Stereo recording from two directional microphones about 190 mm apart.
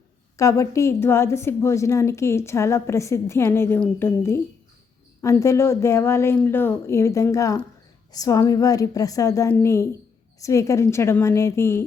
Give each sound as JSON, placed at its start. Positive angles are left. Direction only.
{"t": 0.3, "sound": "a woman's voice", "side_deg": 15}